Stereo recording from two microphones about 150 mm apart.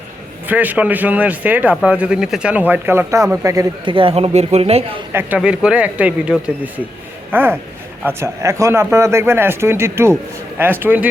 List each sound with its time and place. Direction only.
0.4 s a man's voice: 10° right (ahead or behind)
3.8 s a man's voice: 35° right (ahead or behind)
5.1 s a man's voice: 10° right (ahead or behind)